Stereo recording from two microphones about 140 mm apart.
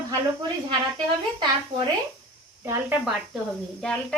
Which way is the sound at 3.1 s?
5° right (ahead or behind).